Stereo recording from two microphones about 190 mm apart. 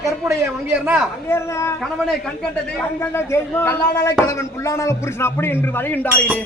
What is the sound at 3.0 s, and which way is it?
Speech, 15° left (ahead or behind).